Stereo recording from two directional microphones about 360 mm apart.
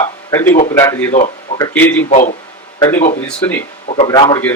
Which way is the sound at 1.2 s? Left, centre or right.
Centre.